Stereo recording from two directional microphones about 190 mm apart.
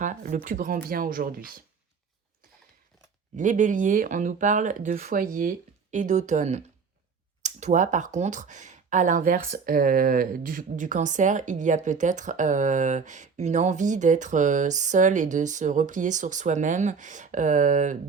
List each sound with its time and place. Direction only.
0.0 s speech: 45° right (ahead or behind)
3.3 s speech: 40° right (ahead or behind)